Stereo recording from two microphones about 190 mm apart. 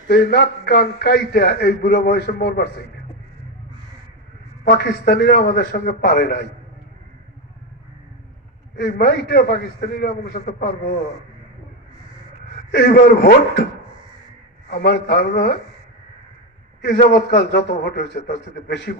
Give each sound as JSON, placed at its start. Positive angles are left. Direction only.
{"t": 0.1, "sound": "a man's voice", "side_deg": 60}
{"t": 4.7, "sound": "a man's voice", "side_deg": 65}
{"t": 8.8, "sound": "a man's voice", "side_deg": 60}
{"t": 12.7, "sound": "a man's voice", "side_deg": 55}
{"t": 14.7, "sound": "a man's voice", "side_deg": 55}
{"t": 16.9, "sound": "a man's voice", "side_deg": 60}